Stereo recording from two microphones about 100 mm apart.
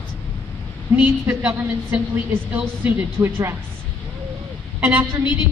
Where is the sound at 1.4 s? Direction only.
20° right (ahead or behind).